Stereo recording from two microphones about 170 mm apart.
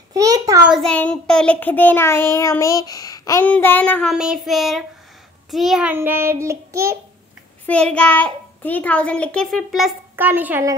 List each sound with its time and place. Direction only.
0.1 s a sound: 20° right (ahead or behind)
0.7 s child singing: centre (ahead or behind); by 3.4 s 20° left (ahead or behind)
3.4 s a child's voice: 10° left (ahead or behind)
5.5 s child singing: centre (ahead or behind)
7.6 s a child's voice: 5° left (ahead or behind); by 10.7 s 10° right (ahead or behind)